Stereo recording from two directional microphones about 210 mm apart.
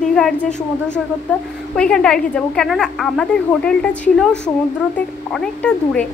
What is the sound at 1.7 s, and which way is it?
A woman's voice, 5° left (ahead or behind).